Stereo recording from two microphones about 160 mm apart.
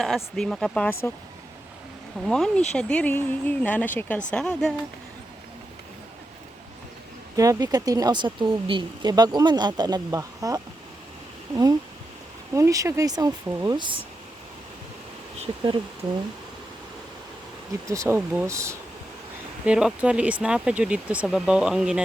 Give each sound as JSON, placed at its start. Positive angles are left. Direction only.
{"t": 0.3, "sound": "speech", "side_deg": 5}
{"t": 2.2, "sound": "speech", "side_deg": 5}
{"t": 7.3, "sound": "speech", "side_deg": -20}
{"t": 15.4, "sound": "speech", "side_deg": -30}
{"t": 17.8, "sound": "speech", "side_deg": -20}
{"t": 19.6, "sound": "speech", "side_deg": -5}